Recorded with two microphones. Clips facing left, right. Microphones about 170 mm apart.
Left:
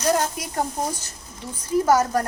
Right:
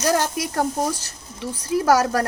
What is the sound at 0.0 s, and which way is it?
Speech, 90° right.